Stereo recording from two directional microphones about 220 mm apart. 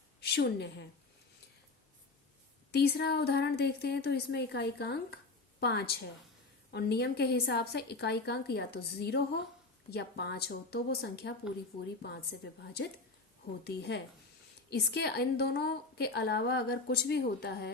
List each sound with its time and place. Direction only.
0.2 s a woman's voice: 50° left (ahead or behind)
2.7 s a woman's voice: 50° left (ahead or behind)
13.7 s a woman's voice: 50° left (ahead or behind)